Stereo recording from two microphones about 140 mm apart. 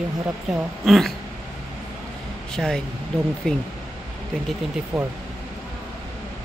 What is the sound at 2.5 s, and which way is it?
A woman's voice, 5° left (ahead or behind).